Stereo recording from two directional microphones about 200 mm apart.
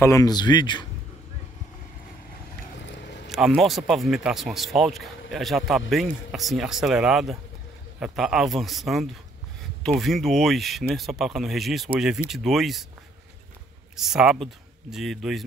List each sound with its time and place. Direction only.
0.0 s speech: 15° left (ahead or behind)
3.3 s speech: centre (ahead or behind)
13.9 s speech: 5° right (ahead or behind)